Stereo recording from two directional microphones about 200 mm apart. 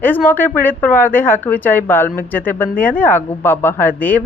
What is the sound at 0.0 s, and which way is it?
Speech, 10° left (ahead or behind).